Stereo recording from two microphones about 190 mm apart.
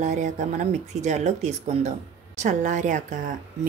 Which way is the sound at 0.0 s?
40° right (ahead or behind).